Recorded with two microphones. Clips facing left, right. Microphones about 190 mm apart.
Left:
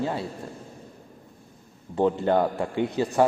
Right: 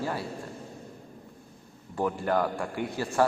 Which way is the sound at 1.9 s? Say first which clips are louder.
Left 5 dB; 25° left (ahead or behind).